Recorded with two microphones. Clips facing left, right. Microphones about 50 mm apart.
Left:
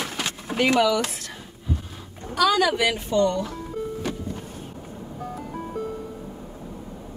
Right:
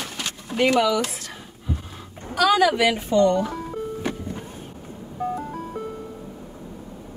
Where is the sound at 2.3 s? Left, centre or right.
Centre.